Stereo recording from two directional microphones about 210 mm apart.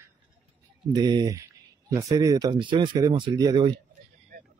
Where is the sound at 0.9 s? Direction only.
20° right (ahead or behind).